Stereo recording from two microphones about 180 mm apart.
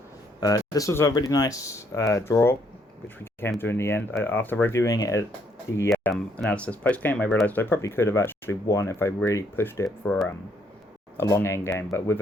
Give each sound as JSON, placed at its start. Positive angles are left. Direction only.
{"t": 0.3, "sound": "speech", "side_deg": 20}
{"t": 3.6, "sound": "speech", "side_deg": 15}
{"t": 5.9, "sound": "speech", "side_deg": 5}
{"t": 11.2, "sound": "speech", "side_deg": 15}